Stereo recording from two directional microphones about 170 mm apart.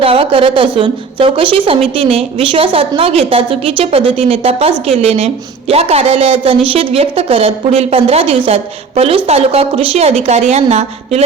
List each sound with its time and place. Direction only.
0.0 s a woman's voice: 35° right (ahead or behind)